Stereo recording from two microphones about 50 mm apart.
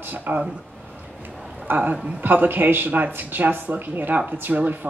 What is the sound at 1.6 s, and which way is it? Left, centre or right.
A man's voice, right.